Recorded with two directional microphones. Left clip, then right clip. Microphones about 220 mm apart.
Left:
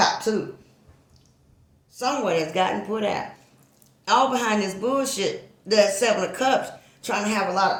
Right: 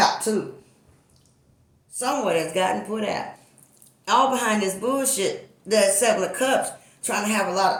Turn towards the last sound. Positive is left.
turn(degrees=25)  # may be behind; listen again after turning